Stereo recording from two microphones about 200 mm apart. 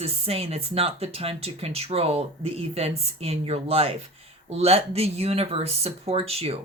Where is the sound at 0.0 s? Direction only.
30° right (ahead or behind).